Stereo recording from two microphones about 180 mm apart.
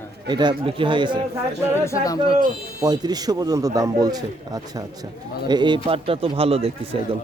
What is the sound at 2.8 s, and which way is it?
A man's voice, 20° right (ahead or behind).